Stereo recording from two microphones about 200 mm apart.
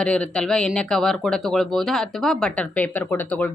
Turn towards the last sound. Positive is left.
turn(degrees=10)  # may be behind; listen again after turning